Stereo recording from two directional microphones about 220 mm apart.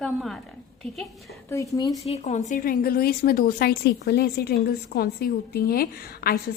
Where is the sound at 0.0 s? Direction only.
Centre (ahead or behind).